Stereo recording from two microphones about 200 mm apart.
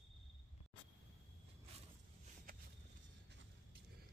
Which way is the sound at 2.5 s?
45° right (ahead or behind).